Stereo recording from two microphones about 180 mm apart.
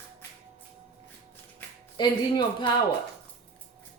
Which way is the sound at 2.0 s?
25° left (ahead or behind).